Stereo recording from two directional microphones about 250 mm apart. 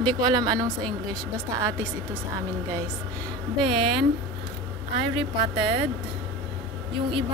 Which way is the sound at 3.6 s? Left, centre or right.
Centre.